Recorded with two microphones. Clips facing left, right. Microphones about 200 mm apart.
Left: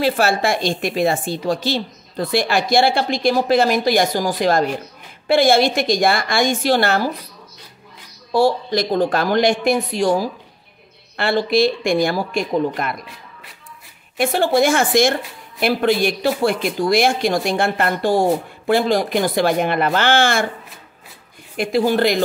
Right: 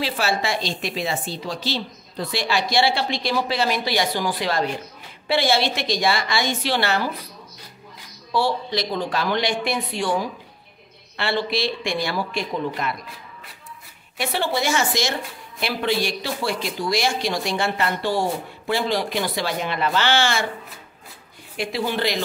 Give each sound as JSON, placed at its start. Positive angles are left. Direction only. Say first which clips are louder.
{"t": 0.0, "sound": "a woman's voice", "louder": "left 6 dB", "side_deg": 50}
{"t": 8.3, "sound": "a woman's voice", "louder": "left 6 dB", "side_deg": 45}
{"t": 14.1, "sound": "a woman's voice", "louder": "left 8 dB", "side_deg": 50}
{"t": 21.5, "sound": "a woman's voice", "louder": "left 8 dB", "side_deg": 45}